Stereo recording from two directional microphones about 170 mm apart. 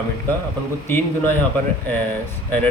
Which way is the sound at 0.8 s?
10° left (ahead or behind).